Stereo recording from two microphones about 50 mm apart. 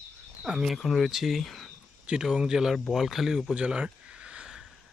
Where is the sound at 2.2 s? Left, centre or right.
Centre.